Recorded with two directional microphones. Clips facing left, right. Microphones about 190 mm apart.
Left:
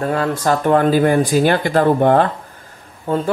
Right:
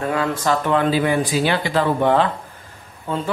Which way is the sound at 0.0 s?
40° left (ahead or behind).